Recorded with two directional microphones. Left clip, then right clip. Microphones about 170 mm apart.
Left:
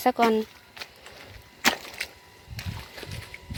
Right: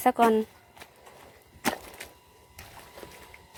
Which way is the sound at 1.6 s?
30° right (ahead or behind).